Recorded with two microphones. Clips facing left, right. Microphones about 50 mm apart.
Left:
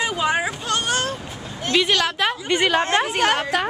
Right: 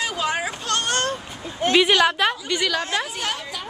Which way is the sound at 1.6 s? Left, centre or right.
Centre.